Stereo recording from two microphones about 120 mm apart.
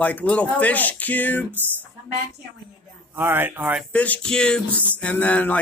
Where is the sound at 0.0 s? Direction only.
10° left (ahead or behind).